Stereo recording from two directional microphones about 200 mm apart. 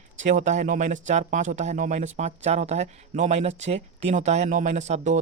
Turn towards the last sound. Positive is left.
turn(degrees=-35)  # may be behind; listen again after turning